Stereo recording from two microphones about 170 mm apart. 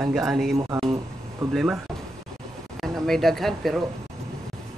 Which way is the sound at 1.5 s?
5° right (ahead or behind).